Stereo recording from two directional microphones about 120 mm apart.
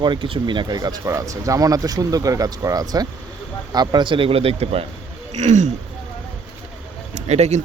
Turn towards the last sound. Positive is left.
turn(degrees=-70)  # may be behind; listen again after turning